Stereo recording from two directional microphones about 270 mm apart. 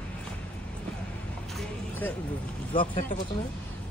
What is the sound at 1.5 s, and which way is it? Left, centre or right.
Music, centre.